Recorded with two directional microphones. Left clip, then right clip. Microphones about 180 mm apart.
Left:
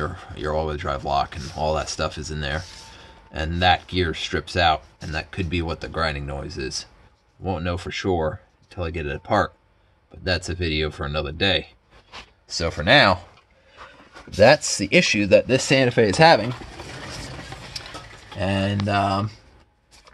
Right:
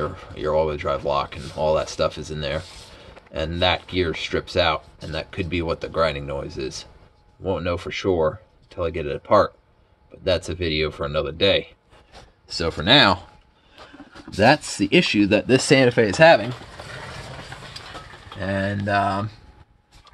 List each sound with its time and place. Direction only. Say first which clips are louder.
0.0 s speech: right 2 dB; 30° left (ahead or behind)
12.7 s speech: even; 15° left (ahead or behind)
14.3 s speech: left 2 dB; 10° left (ahead or behind)
16.2 s speech: right 1 dB; 20° left (ahead or behind)
18.4 s speech: left 1 dB; 35° left (ahead or behind)